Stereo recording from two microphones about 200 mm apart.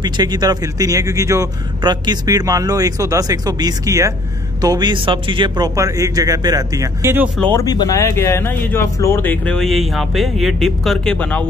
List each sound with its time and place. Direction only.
0.0 s speech: 20° right (ahead or behind)
7.5 s speech: 20° left (ahead or behind)